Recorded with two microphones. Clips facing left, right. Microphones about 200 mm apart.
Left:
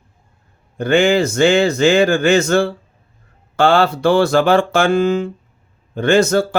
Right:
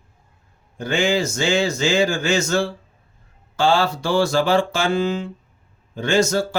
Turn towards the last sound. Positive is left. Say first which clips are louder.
# left 5 dB
turn(degrees=60)  # may be behind; listen again after turning